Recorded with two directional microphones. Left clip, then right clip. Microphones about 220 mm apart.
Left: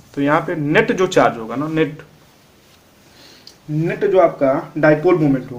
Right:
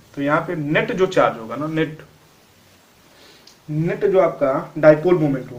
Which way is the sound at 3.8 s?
45° left (ahead or behind).